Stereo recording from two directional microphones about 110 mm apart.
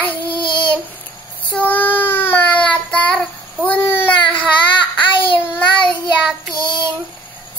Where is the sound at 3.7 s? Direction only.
15° left (ahead or behind).